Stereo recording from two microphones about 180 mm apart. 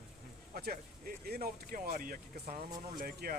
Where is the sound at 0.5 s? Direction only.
55° right (ahead or behind).